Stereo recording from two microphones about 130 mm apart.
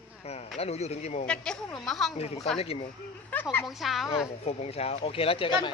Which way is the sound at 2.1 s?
55° left (ahead or behind).